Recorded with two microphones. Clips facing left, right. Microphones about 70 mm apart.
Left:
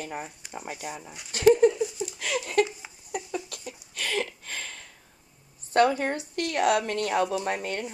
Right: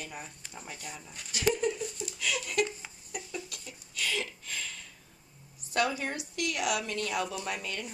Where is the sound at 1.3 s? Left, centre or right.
Left.